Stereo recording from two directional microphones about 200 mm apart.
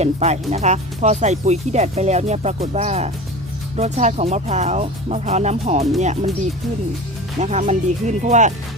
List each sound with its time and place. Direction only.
0.0 s speech: 35° right (ahead or behind)
7.3 s speech: 35° right (ahead or behind)